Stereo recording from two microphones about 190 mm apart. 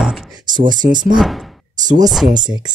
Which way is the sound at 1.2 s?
Centre (ahead or behind).